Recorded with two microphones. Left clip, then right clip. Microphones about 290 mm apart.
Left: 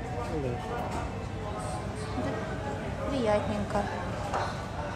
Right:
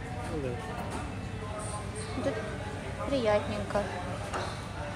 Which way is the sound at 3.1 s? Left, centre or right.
Centre.